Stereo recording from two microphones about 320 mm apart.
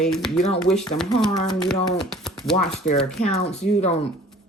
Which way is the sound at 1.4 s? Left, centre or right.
Centre.